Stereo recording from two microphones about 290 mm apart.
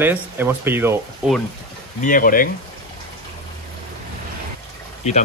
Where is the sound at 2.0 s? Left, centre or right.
Left.